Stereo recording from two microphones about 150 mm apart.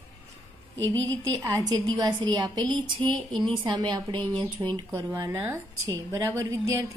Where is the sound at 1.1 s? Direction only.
25° right (ahead or behind).